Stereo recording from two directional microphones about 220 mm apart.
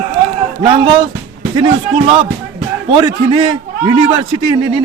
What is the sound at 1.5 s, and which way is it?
A man's voice, 20° right (ahead or behind).